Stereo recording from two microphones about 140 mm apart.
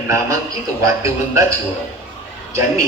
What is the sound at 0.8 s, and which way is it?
Speech, 20° right (ahead or behind).